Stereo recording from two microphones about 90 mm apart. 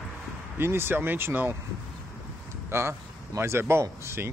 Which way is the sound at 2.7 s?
30° right (ahead or behind).